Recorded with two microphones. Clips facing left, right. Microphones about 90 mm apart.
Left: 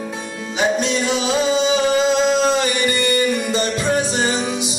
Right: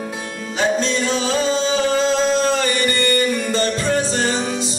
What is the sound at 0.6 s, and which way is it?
Music, 15° left (ahead or behind).